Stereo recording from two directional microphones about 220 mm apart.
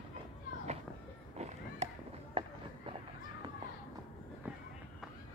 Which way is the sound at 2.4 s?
25° right (ahead or behind).